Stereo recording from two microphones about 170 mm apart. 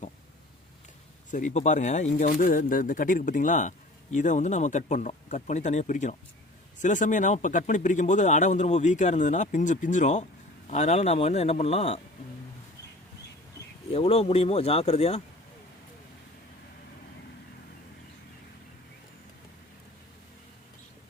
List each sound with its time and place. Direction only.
1.3 s a man's voice: 45° left (ahead or behind)
13.9 s a man's voice: 35° left (ahead or behind)